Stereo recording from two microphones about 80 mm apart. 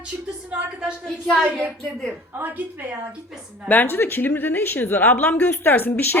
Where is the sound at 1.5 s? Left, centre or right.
Right.